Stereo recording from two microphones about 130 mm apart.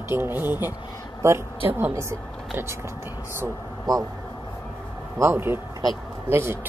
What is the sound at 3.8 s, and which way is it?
Speech, 25° right (ahead or behind).